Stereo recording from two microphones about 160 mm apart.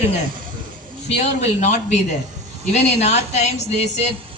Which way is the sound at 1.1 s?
45° left (ahead or behind).